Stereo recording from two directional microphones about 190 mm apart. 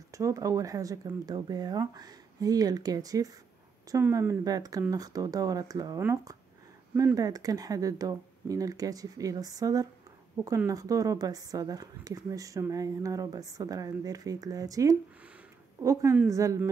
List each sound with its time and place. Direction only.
0.1 s a woman's voice: 15° right (ahead or behind)